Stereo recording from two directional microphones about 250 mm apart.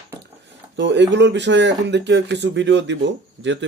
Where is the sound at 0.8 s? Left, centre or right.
Right.